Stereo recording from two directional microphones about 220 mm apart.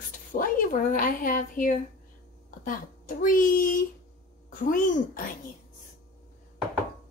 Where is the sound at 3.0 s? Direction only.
40° left (ahead or behind).